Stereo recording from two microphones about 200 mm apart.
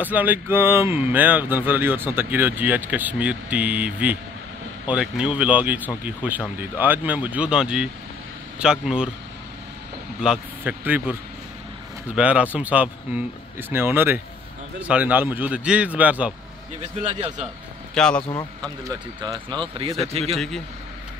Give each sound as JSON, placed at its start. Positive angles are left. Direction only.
{"t": 0.0, "sound": "speech", "side_deg": -10}
{"t": 10.2, "sound": "speech", "side_deg": -5}
{"t": 12.2, "sound": "speech", "side_deg": -5}
{"t": 17.9, "sound": "speech", "side_deg": 5}
{"t": 18.9, "sound": "speech", "side_deg": -20}
{"t": 20.1, "sound": "speech", "side_deg": -30}